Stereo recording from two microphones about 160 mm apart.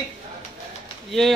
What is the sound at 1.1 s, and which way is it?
Speech, centre (ahead or behind).